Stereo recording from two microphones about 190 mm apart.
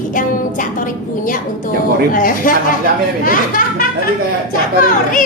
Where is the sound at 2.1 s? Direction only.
45° left (ahead or behind).